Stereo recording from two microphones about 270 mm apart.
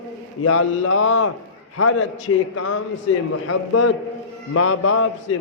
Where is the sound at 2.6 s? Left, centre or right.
Left.